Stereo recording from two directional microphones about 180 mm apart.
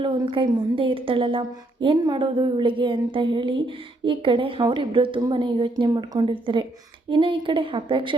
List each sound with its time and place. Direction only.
0.0 s a woman's voice: 30° right (ahead or behind)